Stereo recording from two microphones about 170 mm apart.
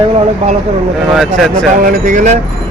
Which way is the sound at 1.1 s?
Centre (ahead or behind).